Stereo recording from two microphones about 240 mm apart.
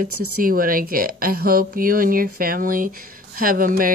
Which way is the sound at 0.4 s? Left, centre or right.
Right.